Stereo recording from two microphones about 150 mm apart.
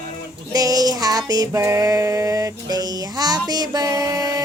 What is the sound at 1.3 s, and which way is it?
Music, 25° right (ahead or behind).